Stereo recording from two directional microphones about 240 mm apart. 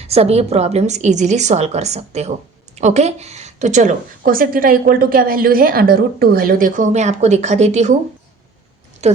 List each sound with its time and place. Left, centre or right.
0.0 s a woman's voice: right
9.0 s speech: right